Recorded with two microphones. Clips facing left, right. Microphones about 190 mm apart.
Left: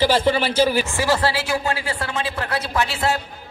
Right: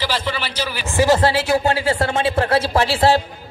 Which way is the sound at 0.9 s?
20° right (ahead or behind).